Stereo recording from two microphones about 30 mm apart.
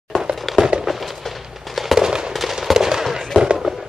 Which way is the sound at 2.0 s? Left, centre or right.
Right.